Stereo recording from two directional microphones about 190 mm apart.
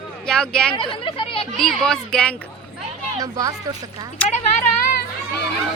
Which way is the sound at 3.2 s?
20° right (ahead or behind).